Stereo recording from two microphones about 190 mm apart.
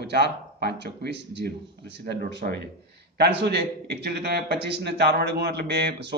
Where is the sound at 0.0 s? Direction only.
60° right (ahead or behind).